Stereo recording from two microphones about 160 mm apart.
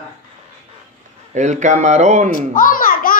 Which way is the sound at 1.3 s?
50° right (ahead or behind).